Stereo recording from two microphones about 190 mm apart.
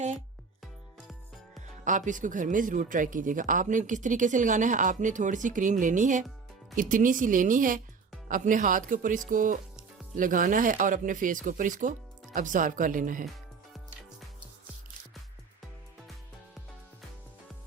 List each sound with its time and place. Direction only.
1.5 s speech: 40° right (ahead or behind)